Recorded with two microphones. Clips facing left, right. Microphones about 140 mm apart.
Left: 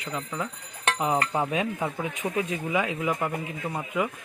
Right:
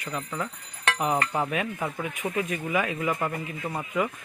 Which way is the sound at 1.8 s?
25° left (ahead or behind).